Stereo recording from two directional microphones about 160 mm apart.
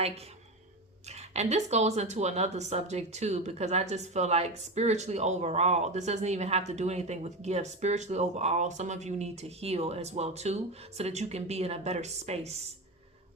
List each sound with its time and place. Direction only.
1.0 s speech: 45° right (ahead or behind)